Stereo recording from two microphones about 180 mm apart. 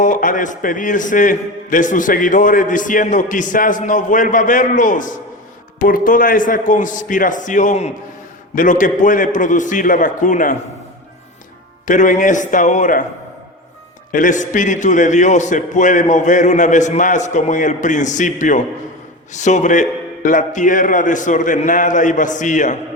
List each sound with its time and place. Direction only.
0.0 s a man's voice: 45° left (ahead or behind)
11.9 s a man's voice: 45° left (ahead or behind)
14.1 s a man's voice: 45° left (ahead or behind)